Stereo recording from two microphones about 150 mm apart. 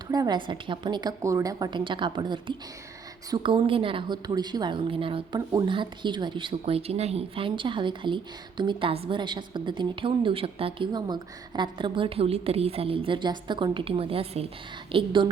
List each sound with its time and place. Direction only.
0.1 s speech: 30° right (ahead or behind)